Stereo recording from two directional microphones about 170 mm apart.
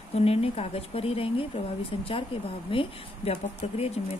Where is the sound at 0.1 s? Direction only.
35° left (ahead or behind).